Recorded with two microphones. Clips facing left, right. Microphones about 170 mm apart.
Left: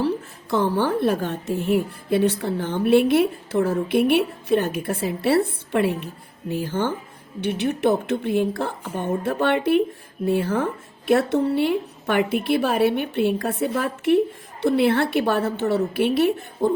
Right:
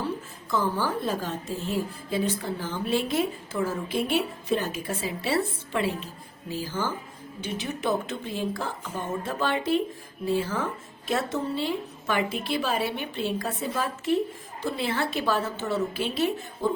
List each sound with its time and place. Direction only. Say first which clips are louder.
0.0 s a woman's voice: left 8 dB; 70° left (ahead or behind)